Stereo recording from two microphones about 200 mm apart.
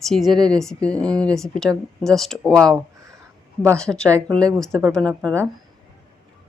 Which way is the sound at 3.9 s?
5° right (ahead or behind).